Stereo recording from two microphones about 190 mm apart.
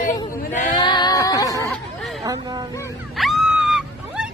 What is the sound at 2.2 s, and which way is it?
Speech, 20° right (ahead or behind).